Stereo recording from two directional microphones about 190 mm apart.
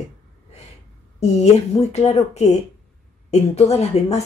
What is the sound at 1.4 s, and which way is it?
A woman's voice, 35° left (ahead or behind).